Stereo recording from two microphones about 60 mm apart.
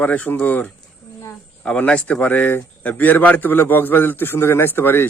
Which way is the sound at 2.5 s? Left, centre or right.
Left.